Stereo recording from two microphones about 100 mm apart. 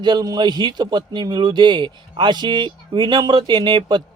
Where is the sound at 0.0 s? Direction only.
45° right (ahead or behind).